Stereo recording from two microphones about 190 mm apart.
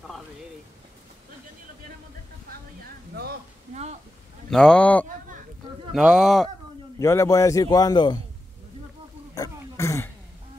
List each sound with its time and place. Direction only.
3.7 s a sound: 35° right (ahead or behind)
4.5 s speech: 5° left (ahead or behind)
7.0 s a man's voice: 15° left (ahead or behind)
9.3 s throat clearing: 15° left (ahead or behind)